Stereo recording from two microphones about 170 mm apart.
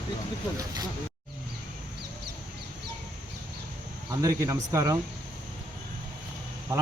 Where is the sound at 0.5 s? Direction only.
20° right (ahead or behind).